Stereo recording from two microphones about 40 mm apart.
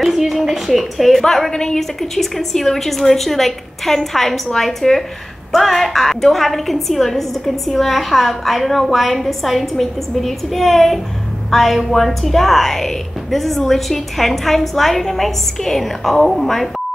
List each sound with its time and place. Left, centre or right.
0.0 s a woman's voice: centre
1.5 s a woman's voice: centre